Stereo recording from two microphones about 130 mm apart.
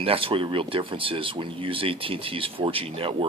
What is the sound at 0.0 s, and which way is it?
Speech, 45° right (ahead or behind).